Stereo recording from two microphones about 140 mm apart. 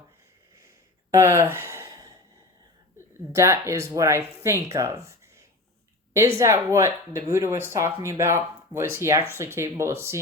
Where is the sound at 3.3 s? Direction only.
20° right (ahead or behind).